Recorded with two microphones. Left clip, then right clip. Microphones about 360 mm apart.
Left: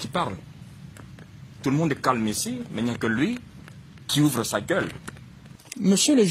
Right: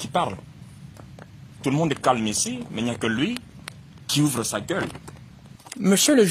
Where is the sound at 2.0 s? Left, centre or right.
Centre.